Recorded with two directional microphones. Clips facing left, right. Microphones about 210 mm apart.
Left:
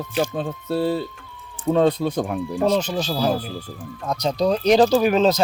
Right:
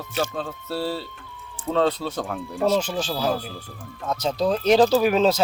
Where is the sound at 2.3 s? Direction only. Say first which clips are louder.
Right 1 dB; centre (ahead or behind).